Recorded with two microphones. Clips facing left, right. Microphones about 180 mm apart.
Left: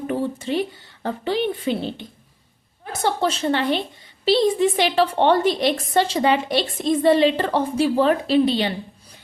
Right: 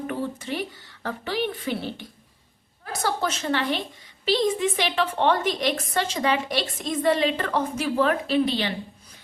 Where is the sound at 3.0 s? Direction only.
30° left (ahead or behind).